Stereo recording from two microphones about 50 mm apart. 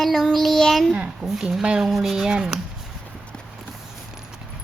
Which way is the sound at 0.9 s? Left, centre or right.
Centre.